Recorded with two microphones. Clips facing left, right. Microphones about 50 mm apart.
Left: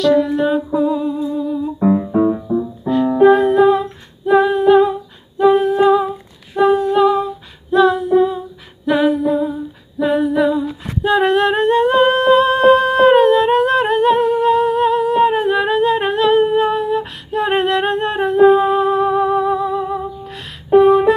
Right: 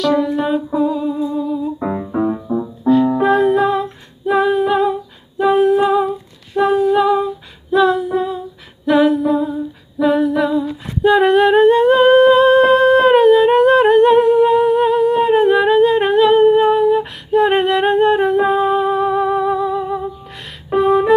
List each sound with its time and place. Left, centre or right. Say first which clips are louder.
0.0 s humming: left 2 dB; centre
1.9 s music: left 6 dB; centre
5.4 s humming: left 1 dB; centre
20.7 s a sound: left 4 dB; centre